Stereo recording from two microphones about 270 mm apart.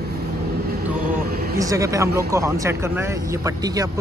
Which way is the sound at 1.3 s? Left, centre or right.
Right.